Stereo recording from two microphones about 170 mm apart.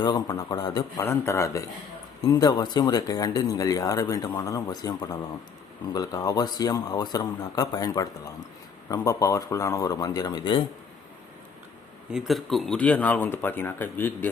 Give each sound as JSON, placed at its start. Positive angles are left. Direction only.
{"t": 0.0, "sound": "speech", "side_deg": 25}
{"t": 12.1, "sound": "speech", "side_deg": 0}